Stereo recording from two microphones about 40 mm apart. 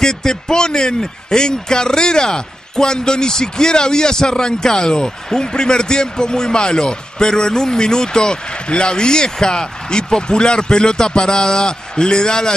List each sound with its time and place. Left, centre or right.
0.0 s a man's voice: centre